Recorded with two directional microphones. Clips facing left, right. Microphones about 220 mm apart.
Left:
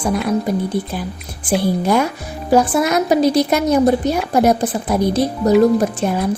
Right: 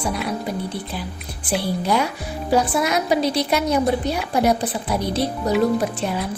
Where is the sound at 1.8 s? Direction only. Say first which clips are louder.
Left 5 dB; 50° left (ahead or behind).